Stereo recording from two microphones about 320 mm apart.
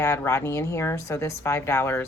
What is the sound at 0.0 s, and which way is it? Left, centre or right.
Speech, centre.